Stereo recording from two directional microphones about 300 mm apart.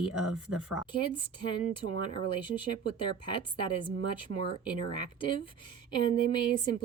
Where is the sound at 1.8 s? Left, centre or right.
Centre.